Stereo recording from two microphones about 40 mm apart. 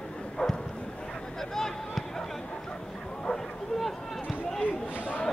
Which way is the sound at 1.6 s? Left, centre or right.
Centre.